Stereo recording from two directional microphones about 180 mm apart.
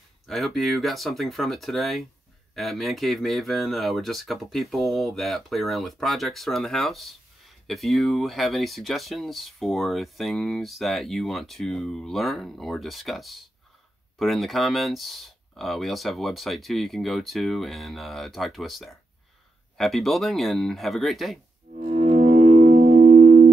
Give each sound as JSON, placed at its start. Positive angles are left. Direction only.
{"t": 0.3, "sound": "speech", "side_deg": 0}
{"t": 21.7, "sound": "music", "side_deg": -50}